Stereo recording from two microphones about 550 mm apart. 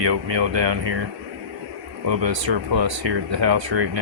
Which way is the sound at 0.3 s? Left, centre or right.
Right.